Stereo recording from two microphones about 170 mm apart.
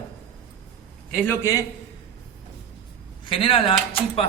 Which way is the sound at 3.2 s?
30° left (ahead or behind).